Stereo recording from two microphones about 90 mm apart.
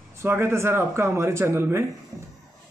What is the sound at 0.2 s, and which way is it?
A man's voice, 25° right (ahead or behind).